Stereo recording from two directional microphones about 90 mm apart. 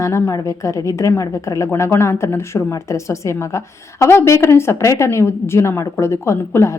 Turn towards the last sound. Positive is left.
turn(degrees=30)  # may be behind; listen again after turning